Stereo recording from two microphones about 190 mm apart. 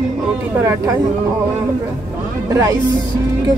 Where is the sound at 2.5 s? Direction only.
15° right (ahead or behind).